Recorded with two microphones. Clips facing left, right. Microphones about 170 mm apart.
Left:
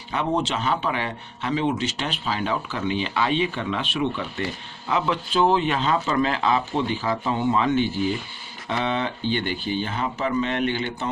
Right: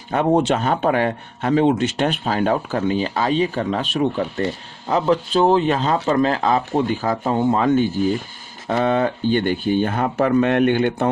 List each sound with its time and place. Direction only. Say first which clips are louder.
0.1 s a man's voice: right 7 dB; 50° right (ahead or behind)